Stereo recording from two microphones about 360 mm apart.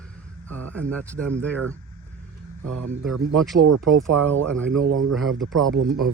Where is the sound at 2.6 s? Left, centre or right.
Right.